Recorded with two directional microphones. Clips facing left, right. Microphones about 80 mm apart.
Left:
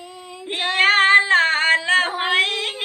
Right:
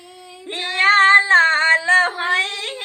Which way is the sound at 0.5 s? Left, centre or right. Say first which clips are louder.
Right 2 dB; right.